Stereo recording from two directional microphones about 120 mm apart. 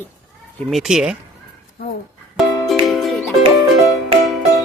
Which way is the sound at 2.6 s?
Centre (ahead or behind).